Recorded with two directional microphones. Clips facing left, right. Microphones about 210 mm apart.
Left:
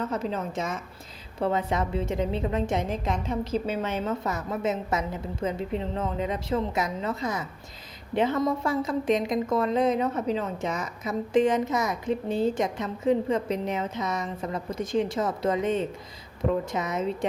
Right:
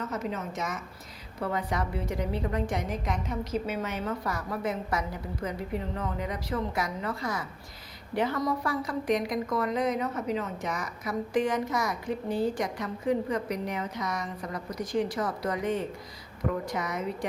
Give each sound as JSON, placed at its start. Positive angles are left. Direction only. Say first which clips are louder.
{"t": 0.0, "sound": "a woman's voice", "louder": "left 4 dB", "side_deg": 30}